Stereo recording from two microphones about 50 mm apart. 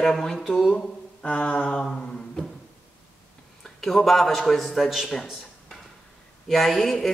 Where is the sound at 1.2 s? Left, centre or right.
Left.